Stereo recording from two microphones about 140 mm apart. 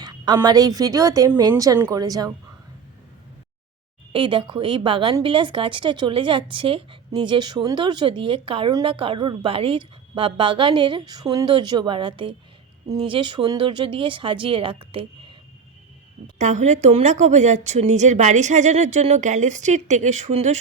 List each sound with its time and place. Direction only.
0.4 s speech: 25° right (ahead or behind)
4.1 s a woman's voice: 35° right (ahead or behind)
16.4 s speech: 55° right (ahead or behind)